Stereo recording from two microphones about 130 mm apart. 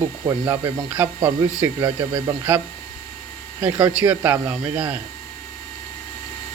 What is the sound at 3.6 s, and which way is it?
Speech, 15° right (ahead or behind).